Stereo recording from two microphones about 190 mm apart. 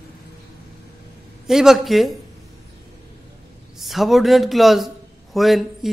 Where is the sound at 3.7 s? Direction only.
Centre (ahead or behind).